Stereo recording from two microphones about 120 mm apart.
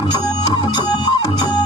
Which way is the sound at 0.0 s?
35° left (ahead or behind).